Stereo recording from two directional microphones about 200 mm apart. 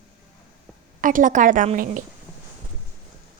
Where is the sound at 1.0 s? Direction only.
40° right (ahead or behind).